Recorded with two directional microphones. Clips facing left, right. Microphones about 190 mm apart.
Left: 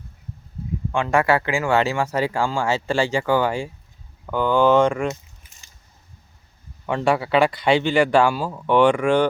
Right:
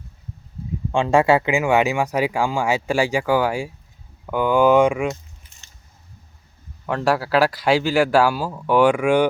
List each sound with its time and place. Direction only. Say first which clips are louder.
0.9 s speech: right 3 dB; 25° right (ahead or behind); by 5.1 s 5° right (ahead or behind)
6.8 s speech: even; centre (ahead or behind)